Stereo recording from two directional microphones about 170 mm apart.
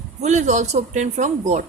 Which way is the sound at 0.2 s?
45° right (ahead or behind).